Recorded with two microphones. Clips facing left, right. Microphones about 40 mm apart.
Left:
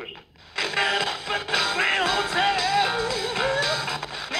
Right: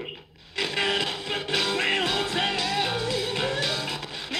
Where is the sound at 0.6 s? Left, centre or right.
Left.